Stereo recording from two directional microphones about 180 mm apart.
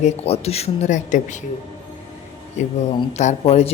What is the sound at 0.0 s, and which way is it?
Speech, 35° left (ahead or behind).